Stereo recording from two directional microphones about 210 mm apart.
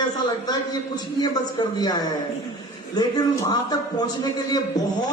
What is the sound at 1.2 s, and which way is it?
A man's voice, 20° left (ahead or behind).